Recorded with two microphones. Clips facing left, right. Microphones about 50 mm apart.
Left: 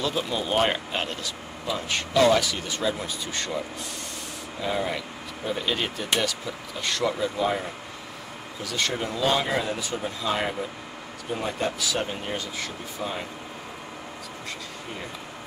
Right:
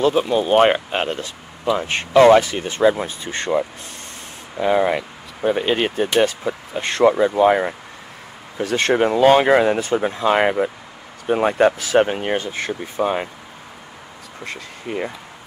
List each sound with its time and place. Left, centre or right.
0.3 s speech: right
14.4 s speech: right